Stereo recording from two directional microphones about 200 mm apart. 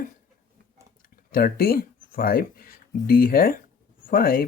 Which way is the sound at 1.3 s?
45° left (ahead or behind).